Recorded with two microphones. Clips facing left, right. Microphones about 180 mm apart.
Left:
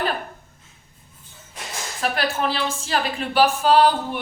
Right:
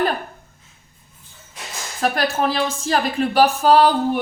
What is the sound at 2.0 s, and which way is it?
A woman's voice, 45° right (ahead or behind).